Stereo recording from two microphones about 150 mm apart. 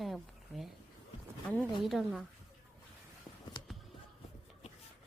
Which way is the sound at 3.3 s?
25° left (ahead or behind).